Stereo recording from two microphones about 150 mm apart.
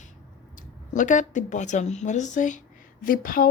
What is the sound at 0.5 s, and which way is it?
Speech, 55° left (ahead or behind).